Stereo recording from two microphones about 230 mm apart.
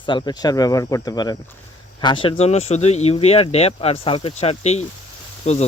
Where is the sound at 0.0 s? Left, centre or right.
Centre.